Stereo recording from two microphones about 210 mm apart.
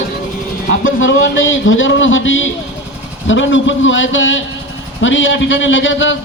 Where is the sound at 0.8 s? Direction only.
65° left (ahead or behind).